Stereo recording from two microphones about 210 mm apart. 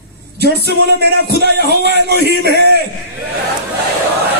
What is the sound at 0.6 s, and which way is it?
Music, 50° right (ahead or behind).